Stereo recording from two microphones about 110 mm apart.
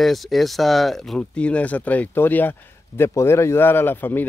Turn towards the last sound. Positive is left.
turn(degrees=20)  # may be behind; listen again after turning